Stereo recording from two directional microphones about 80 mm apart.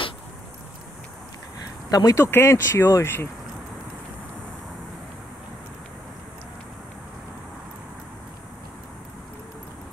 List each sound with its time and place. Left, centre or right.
1.9 s speech: left